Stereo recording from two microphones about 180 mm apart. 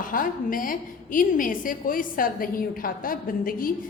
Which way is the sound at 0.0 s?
50° left (ahead or behind).